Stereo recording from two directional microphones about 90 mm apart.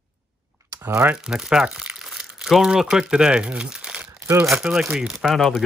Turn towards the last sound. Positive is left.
turn(degrees=0)  # may be behind; listen again after turning